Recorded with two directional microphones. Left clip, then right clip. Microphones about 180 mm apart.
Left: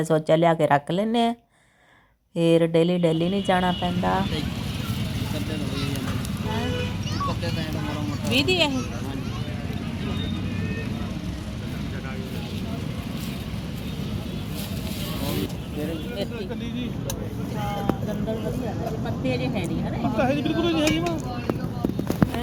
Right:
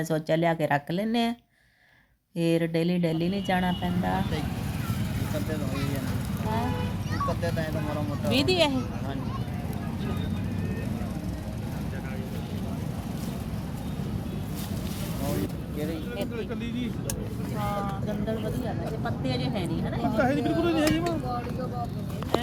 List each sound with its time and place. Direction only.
0.0 s speech: 10° left (ahead or behind)
2.4 s speech: 10° left (ahead or behind)
8.3 s speech: 5° left (ahead or behind)
20.1 s speech: 35° right (ahead or behind)